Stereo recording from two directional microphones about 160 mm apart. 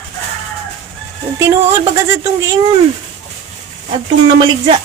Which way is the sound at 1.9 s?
20° right (ahead or behind).